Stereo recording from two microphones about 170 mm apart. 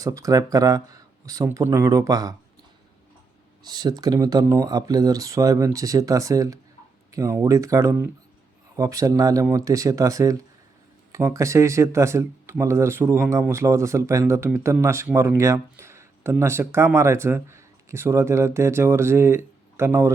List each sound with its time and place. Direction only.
0.0 s speech: 20° right (ahead or behind)
3.6 s speech: 25° right (ahead or behind)